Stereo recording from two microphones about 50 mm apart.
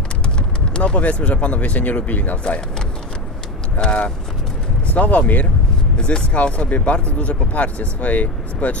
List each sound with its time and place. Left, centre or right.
0.4 s speech: left
3.8 s speech: left